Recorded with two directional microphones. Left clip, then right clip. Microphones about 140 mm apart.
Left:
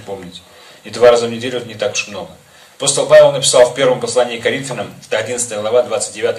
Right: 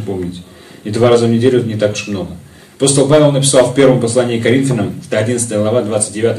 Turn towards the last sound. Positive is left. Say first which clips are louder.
# left 1 dB
turn(degrees=40)  # may be behind; listen again after turning